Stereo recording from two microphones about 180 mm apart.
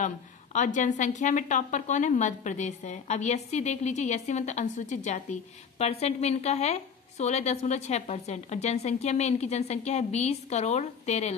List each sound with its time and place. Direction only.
0.0 s a woman's voice: 45° left (ahead or behind)